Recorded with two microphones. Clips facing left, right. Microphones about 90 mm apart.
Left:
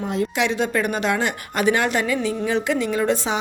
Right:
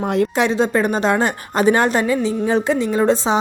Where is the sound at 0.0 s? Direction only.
60° right (ahead or behind).